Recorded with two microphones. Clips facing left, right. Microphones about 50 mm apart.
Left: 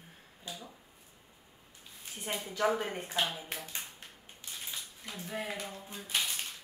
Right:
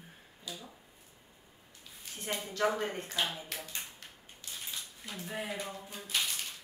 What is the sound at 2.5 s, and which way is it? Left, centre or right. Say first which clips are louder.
Speech: left 1 dB; centre.